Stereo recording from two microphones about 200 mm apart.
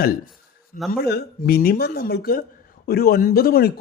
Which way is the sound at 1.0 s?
50° left (ahead or behind).